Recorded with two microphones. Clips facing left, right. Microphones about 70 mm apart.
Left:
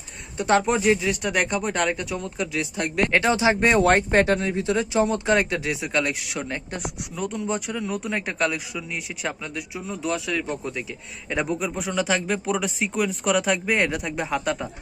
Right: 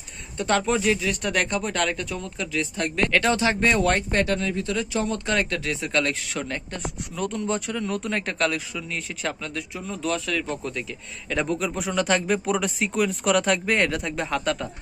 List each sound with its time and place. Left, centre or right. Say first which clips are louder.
0.4 s a man's voice: left 2 dB; centre